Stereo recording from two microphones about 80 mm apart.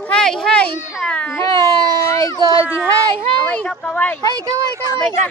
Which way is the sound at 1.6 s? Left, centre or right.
Right.